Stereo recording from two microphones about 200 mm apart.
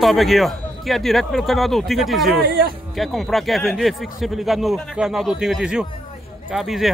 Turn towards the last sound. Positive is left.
turn(degrees=0)  # may be behind; listen again after turning